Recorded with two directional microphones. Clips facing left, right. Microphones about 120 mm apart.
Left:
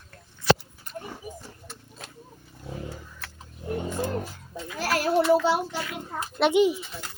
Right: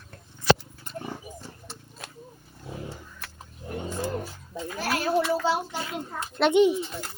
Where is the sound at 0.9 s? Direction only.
30° right (ahead or behind).